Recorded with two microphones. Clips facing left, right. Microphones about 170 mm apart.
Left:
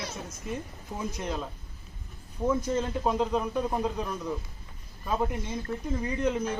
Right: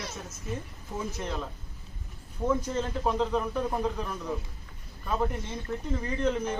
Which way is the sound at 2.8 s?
10° left (ahead or behind).